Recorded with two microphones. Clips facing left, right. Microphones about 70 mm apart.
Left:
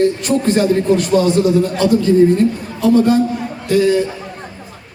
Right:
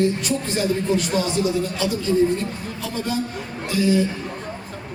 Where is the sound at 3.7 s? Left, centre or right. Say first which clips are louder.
Left 6 dB; left.